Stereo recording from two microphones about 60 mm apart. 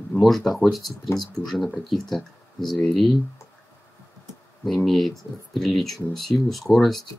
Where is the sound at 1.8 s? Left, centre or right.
Centre.